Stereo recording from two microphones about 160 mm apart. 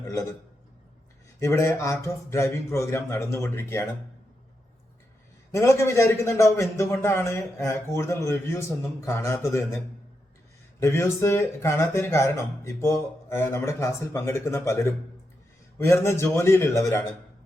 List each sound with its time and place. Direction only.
0.0 s a man's voice: 20° left (ahead or behind)
1.4 s a man's voice: 15° left (ahead or behind)
5.5 s a man's voice: 15° left (ahead or behind)
10.8 s a man's voice: 15° left (ahead or behind)
15.8 s a man's voice: 15° left (ahead or behind)